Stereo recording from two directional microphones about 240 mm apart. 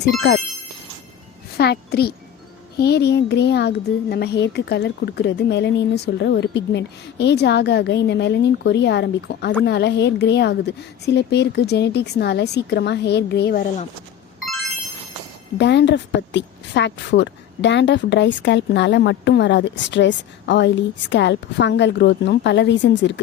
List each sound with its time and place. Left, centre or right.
0.2 s a woman's voice: left
1.5 s a child's voice: left
14.4 s a sound: centre
15.5 s a woman's voice: left